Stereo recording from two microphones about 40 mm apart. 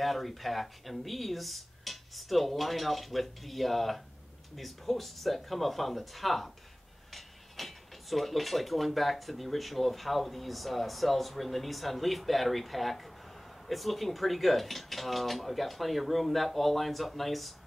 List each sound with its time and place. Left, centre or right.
0.0 s speech: centre